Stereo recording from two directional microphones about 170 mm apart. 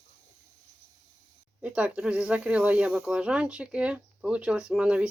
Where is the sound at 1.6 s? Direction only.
5° right (ahead or behind).